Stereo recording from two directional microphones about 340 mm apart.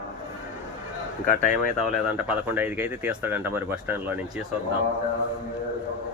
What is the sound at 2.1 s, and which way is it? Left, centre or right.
A man's voice, centre.